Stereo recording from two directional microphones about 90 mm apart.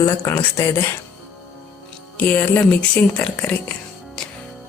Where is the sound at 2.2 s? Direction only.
20° left (ahead or behind).